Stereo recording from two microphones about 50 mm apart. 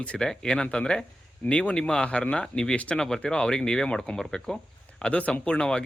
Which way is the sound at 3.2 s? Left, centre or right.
Centre.